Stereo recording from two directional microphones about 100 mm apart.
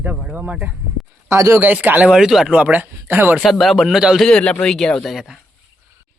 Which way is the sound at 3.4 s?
Centre (ahead or behind).